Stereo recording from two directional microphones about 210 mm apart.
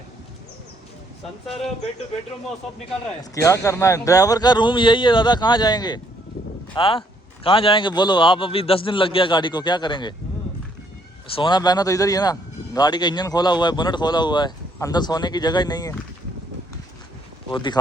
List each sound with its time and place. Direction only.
3.4 s speech: 15° left (ahead or behind)
11.3 s speech: 25° left (ahead or behind)
17.5 s speech: 20° left (ahead or behind)